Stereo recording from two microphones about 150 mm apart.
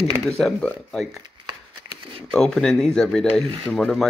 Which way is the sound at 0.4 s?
5° left (ahead or behind).